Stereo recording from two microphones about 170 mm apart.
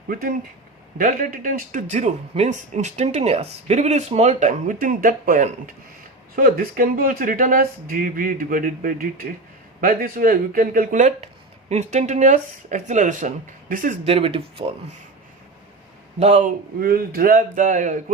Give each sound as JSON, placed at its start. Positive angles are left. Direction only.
{"t": 0.1, "sound": "speech", "side_deg": -55}
{"t": 16.8, "sound": "speech", "side_deg": -60}